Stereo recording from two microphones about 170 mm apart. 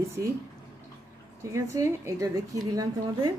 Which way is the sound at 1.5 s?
15° right (ahead or behind).